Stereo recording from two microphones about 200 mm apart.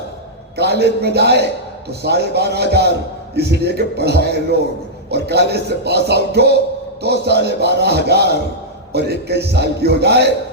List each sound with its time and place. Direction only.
0.5 s a man's voice: 55° right (ahead or behind)